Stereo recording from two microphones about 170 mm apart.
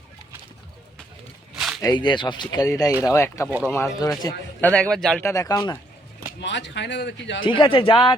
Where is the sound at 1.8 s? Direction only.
25° left (ahead or behind).